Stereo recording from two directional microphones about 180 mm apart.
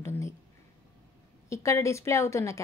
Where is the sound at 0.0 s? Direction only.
15° left (ahead or behind).